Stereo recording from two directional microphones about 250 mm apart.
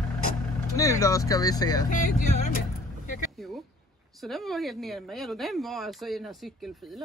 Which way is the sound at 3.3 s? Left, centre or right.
Centre.